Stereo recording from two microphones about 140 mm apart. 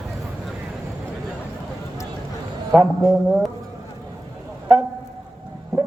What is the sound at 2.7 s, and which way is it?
Speech, 5° right (ahead or behind).